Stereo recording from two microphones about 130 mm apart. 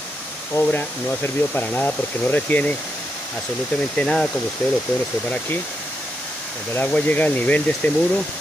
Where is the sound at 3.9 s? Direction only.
5° left (ahead or behind).